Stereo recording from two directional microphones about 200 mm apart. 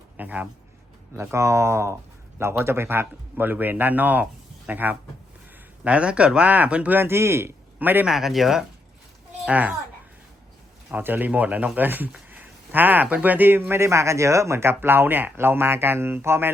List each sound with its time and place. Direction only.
0.2 s speech: 5° right (ahead or behind)
10.9 s speech: 10° right (ahead or behind)